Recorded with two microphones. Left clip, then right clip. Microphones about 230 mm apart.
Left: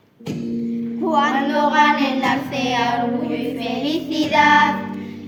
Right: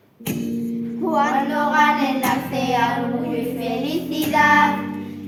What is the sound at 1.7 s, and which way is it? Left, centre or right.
Child singing, left.